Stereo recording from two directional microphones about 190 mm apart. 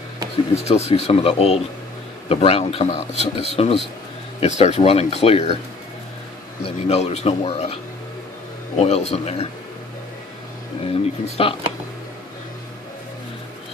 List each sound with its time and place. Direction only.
0.7 s speech: 35° left (ahead or behind)
6.6 s speech: 35° left (ahead or behind)
10.8 s speech: 30° left (ahead or behind)